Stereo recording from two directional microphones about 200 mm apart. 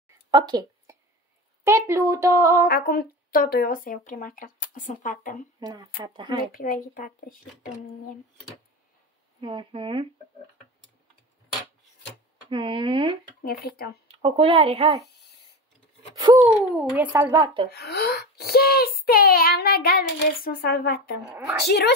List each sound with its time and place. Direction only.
0.3 s a sound: 20° right (ahead or behind)
1.6 s a woman's voice: 15° right (ahead or behind)
2.7 s speech: 50° left (ahead or behind)
5.6 s speech: 20° right (ahead or behind)
6.5 s speech: 45° left (ahead or behind)
9.4 s speech: 25° right (ahead or behind)
12.4 s speech: 25° right (ahead or behind)
13.4 s speech: 50° left (ahead or behind)
14.0 s speech: 25° right (ahead or behind)
16.7 s a woman's voice: 5° right (ahead or behind)
17.6 s a woman's voice: 55° left (ahead or behind)